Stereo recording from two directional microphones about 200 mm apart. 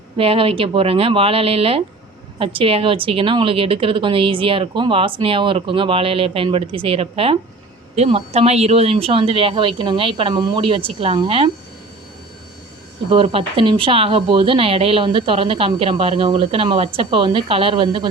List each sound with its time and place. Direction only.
0.2 s speech: 30° right (ahead or behind)
13.1 s speech: 30° right (ahead or behind)